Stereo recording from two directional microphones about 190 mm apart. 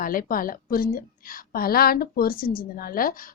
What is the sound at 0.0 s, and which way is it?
Speech, 45° left (ahead or behind).